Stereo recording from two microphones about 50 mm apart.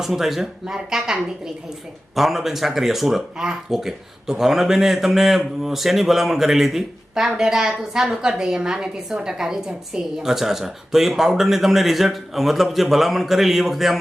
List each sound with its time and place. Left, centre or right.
0.0 s speech: centre